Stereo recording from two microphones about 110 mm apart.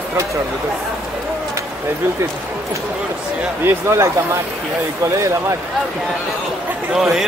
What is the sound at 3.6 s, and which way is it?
Speech, 25° right (ahead or behind).